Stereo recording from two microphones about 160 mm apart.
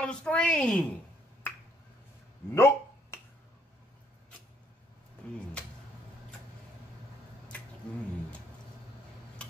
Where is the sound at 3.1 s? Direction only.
15° left (ahead or behind).